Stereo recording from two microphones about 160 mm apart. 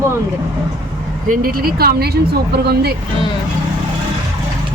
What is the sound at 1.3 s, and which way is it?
A woman's voice, 65° right (ahead or behind).